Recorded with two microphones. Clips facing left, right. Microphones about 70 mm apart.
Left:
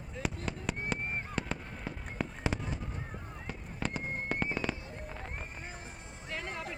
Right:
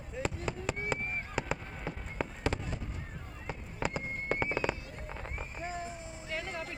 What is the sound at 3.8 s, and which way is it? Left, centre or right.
Fireworks, centre.